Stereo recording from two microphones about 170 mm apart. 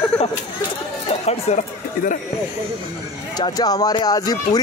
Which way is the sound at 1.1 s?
40° left (ahead or behind).